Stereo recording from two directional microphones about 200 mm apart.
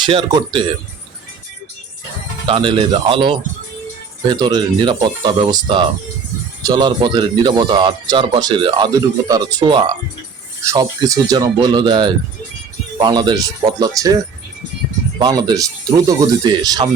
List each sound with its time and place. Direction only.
0.0 s speech: 25° right (ahead or behind)
2.5 s speech: 25° right (ahead or behind)
15.2 s speech: 20° right (ahead or behind)